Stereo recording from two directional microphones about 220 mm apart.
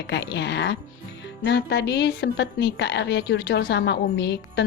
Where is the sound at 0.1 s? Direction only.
50° left (ahead or behind).